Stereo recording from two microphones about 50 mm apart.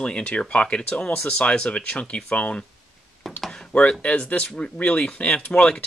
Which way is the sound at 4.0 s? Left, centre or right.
Left.